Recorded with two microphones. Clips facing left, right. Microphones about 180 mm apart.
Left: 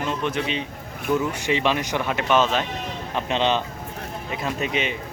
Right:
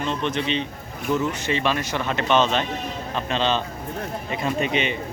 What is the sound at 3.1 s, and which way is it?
Speech, 15° left (ahead or behind).